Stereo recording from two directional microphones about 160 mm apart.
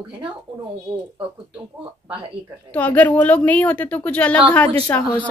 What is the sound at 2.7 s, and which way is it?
Speech, 10° left (ahead or behind).